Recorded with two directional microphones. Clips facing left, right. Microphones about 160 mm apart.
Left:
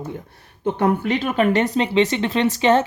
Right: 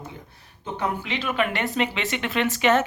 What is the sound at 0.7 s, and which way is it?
Speech, 50° left (ahead or behind).